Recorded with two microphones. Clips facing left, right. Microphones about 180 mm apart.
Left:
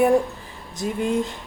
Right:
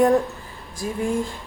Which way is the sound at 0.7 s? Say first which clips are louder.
Left 1 dB; 20° left (ahead or behind).